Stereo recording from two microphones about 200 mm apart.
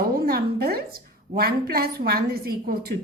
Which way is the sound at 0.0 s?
50° right (ahead or behind).